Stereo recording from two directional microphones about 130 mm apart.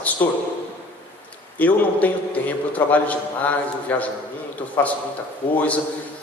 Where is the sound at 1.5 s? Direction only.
10° left (ahead or behind).